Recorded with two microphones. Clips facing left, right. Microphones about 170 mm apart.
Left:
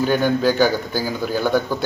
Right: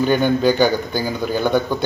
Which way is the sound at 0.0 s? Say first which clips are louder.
Right 2 dB; 5° left (ahead or behind).